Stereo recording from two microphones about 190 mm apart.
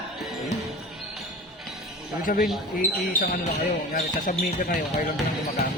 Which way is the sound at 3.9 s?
45° left (ahead or behind).